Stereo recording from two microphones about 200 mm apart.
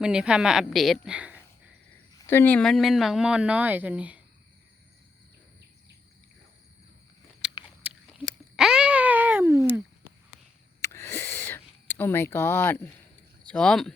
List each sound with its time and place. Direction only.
0.0 s speech: 5° right (ahead or behind)
2.1 s speech: 10° left (ahead or behind); by 4.2 s 5° right (ahead or behind)
7.4 s biting: 5° right (ahead or behind)
7.8 s cat: 5° right (ahead or behind)
10.8 s a sound: 15° left (ahead or behind)
13.5 s speech: 5° left (ahead or behind)